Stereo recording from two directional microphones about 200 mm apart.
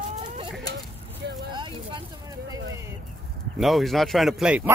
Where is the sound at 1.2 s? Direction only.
60° right (ahead or behind).